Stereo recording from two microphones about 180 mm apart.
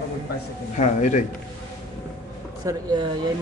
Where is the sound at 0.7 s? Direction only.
40° left (ahead or behind).